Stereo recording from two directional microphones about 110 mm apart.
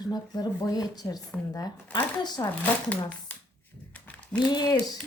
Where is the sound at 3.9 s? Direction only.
15° left (ahead or behind).